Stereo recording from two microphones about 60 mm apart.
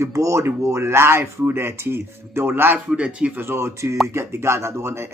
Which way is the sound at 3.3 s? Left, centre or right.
Right.